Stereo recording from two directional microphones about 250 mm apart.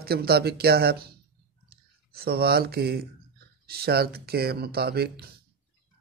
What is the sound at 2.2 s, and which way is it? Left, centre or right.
Speech, right.